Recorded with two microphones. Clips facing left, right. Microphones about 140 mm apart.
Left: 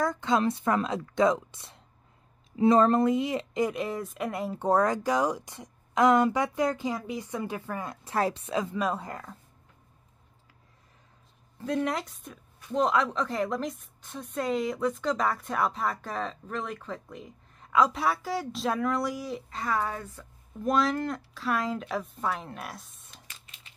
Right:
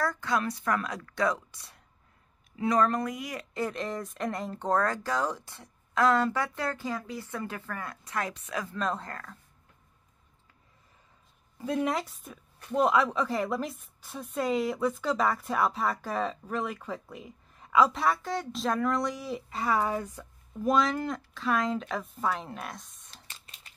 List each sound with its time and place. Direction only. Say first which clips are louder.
0.0 s a woman's voice: left 4 dB; 20° left (ahead or behind)
3.6 s speech: left 3 dB; 10° left (ahead or behind); by 8.7 s 25° left (ahead or behind)
8.7 s speech: left 2 dB; 10° left (ahead or behind)
11.5 s a woman's voice: even; 5° right (ahead or behind)
20.6 s a woman's voice: even; centre (ahead or behind)
23.1 s typing: right 1 dB; 35° right (ahead or behind)